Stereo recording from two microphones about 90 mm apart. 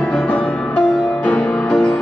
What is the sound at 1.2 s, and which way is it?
Music, 15° left (ahead or behind).